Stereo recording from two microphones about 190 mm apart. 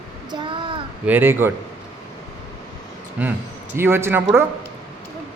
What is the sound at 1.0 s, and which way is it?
Speech, 10° right (ahead or behind).